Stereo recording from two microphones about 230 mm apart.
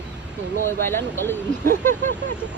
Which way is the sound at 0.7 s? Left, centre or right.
Centre.